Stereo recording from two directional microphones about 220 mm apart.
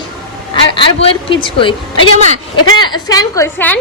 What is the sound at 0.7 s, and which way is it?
A woman's voice, 25° left (ahead or behind).